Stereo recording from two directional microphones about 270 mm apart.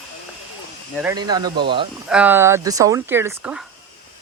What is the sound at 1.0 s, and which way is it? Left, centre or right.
Speech, centre.